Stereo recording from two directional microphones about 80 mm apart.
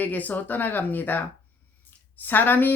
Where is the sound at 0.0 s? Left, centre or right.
Left.